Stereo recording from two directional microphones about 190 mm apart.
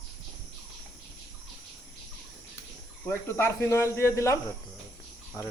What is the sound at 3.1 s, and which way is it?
Speech, 10° left (ahead or behind).